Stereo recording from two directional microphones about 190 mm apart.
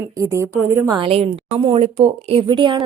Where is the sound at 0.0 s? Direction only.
15° right (ahead or behind).